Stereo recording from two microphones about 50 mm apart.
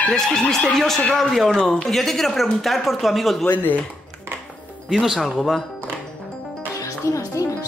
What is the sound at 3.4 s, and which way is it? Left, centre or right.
Speech, left.